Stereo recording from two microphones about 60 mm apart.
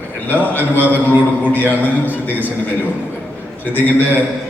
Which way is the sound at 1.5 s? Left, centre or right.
Right.